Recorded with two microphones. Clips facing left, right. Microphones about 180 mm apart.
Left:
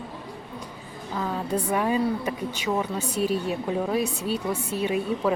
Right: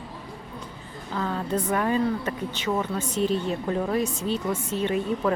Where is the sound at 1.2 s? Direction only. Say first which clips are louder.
Even; 10° left (ahead or behind).